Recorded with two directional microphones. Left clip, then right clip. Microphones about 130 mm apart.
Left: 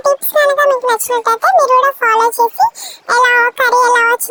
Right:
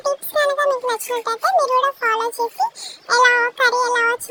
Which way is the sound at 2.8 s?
50° left (ahead or behind).